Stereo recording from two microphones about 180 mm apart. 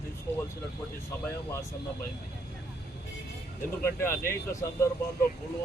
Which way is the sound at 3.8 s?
15° left (ahead or behind).